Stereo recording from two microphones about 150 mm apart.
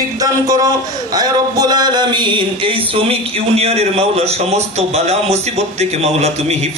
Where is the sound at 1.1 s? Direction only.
25° right (ahead or behind).